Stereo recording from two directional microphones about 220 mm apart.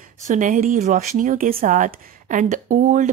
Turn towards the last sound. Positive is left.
turn(degrees=-35)  # may be behind; listen again after turning